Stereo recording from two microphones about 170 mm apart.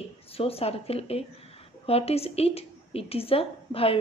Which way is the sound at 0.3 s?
35° left (ahead or behind).